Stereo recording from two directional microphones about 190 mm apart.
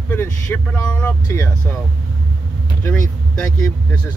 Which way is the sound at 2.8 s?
5° left (ahead or behind).